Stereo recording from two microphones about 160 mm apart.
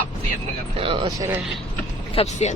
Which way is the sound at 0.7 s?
30° right (ahead or behind).